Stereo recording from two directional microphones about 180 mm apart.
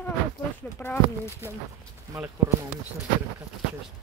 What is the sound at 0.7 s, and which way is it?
Speech, 10° left (ahead or behind).